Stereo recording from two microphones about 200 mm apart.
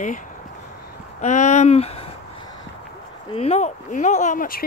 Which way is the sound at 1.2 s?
35° left (ahead or behind).